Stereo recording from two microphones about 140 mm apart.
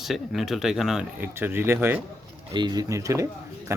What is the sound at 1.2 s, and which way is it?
Speech, 15° right (ahead or behind).